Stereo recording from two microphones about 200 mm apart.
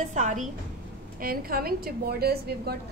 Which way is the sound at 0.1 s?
35° right (ahead or behind).